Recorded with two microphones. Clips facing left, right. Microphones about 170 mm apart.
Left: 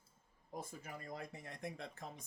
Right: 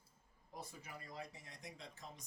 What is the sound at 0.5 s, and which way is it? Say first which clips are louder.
Speech: left 4 dB; 50° left (ahead or behind).